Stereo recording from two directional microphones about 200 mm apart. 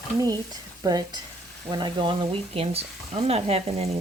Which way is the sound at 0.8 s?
20° right (ahead or behind).